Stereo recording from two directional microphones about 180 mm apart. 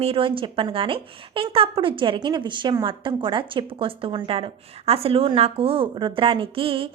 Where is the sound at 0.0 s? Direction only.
30° right (ahead or behind).